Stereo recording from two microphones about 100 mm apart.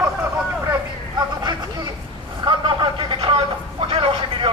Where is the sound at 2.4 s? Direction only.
55° right (ahead or behind).